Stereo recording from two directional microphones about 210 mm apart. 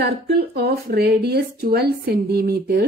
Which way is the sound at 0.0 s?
50° right (ahead or behind).